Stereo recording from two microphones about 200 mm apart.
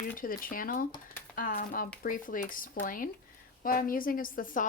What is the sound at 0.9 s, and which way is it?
Speech, 20° left (ahead or behind).